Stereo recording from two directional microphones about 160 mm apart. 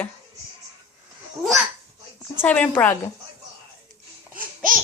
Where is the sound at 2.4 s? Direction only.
10° left (ahead or behind).